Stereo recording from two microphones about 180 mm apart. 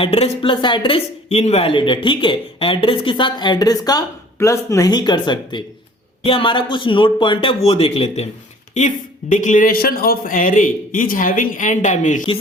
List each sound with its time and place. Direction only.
0.0 s a man's voice: 30° left (ahead or behind)